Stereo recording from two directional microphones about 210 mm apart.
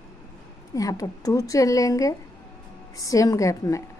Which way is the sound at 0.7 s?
15° left (ahead or behind).